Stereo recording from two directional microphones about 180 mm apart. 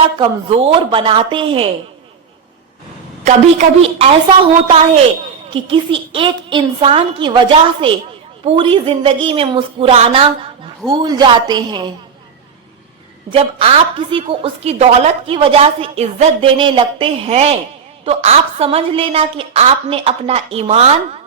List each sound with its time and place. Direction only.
0.2 s a woman's voice: 35° right (ahead or behind)
3.2 s a woman's voice: 40° right (ahead or behind)
5.5 s a woman's voice: 30° right (ahead or behind)
13.3 s a woman's voice: 30° right (ahead or behind)